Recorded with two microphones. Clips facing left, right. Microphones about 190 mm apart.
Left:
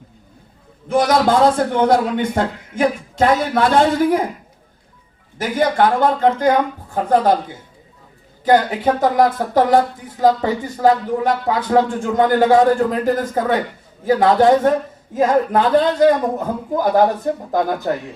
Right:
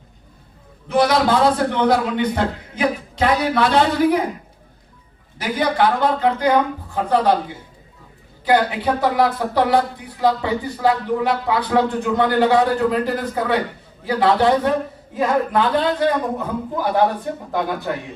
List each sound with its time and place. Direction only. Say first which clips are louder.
0.9 s speech: left 1 dB; 45° left (ahead or behind)
5.4 s speech: left 3 dB; 45° left (ahead or behind)
8.4 s speech: left 3 dB; 45° left (ahead or behind)